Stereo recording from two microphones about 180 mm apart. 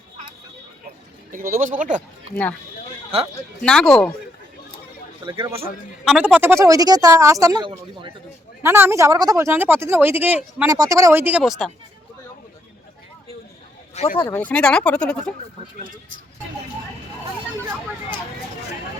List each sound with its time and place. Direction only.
1.3 s speech: 50° right (ahead or behind)
3.6 s speech: 5° left (ahead or behind)
5.2 s speech: 25° right (ahead or behind)
6.1 s speech: 5° right (ahead or behind)
13.9 s speech: 40° left (ahead or behind)
14.3 s speech: 10° left (ahead or behind)